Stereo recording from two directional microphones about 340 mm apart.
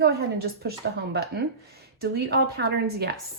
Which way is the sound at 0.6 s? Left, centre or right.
Right.